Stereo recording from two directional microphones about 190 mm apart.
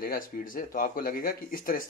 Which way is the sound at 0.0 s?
50° left (ahead or behind).